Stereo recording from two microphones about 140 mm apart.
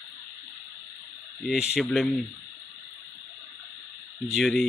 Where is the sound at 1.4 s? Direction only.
Centre (ahead or behind).